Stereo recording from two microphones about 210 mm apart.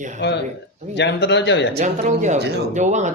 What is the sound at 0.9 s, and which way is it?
Speech, 55° left (ahead or behind).